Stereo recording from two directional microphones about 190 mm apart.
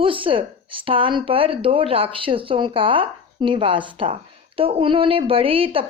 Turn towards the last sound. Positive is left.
turn(degrees=-30)  # may be behind; listen again after turning